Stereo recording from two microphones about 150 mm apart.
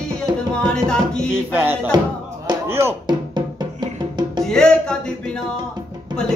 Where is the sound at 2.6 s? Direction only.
15° right (ahead or behind).